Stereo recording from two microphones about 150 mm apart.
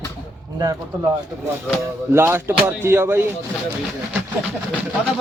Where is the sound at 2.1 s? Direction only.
15° right (ahead or behind).